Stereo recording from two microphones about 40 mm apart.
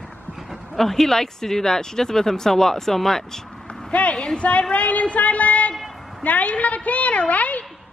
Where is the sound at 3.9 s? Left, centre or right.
Left.